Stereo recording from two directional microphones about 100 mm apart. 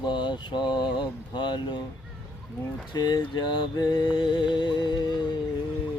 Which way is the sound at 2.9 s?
45° left (ahead or behind).